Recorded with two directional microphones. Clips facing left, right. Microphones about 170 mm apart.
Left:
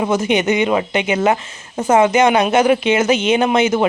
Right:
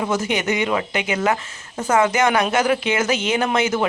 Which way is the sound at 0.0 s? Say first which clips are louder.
Left 5 dB; 20° left (ahead or behind).